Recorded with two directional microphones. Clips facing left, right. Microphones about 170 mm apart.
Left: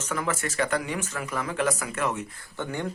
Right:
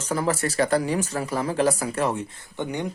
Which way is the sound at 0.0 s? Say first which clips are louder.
Right 5 dB; 35° right (ahead or behind).